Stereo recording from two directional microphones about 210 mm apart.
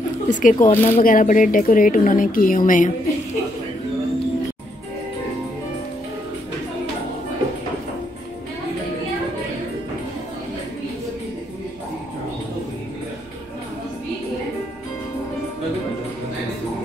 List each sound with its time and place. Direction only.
0.3 s speech: 40° left (ahead or behind)